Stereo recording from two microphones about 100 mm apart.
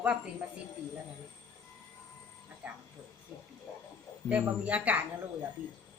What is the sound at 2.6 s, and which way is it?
Speech, 15° right (ahead or behind).